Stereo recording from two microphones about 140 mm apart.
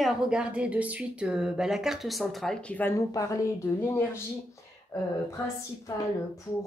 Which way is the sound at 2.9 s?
25° left (ahead or behind).